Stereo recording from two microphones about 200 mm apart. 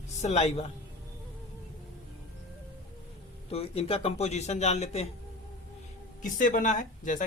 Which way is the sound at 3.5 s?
30° left (ahead or behind).